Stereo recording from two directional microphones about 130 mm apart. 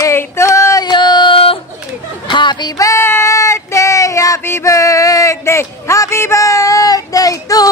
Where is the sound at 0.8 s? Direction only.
35° left (ahead or behind).